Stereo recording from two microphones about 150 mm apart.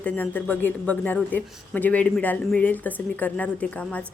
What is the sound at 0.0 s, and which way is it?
A man's voice, 10° left (ahead or behind).